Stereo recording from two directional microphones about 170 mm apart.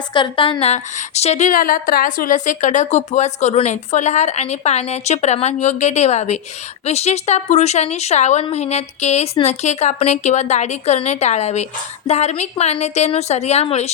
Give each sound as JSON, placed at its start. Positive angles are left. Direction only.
{"t": 0.1, "sound": "speech", "side_deg": 30}